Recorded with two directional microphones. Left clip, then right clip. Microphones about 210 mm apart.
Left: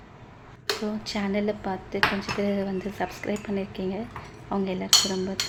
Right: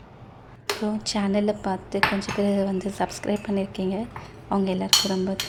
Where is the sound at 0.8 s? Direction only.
25° right (ahead or behind).